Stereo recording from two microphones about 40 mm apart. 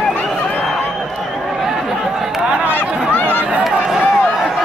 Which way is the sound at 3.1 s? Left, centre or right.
Left.